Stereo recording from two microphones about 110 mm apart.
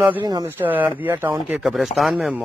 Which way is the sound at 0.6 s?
15° right (ahead or behind).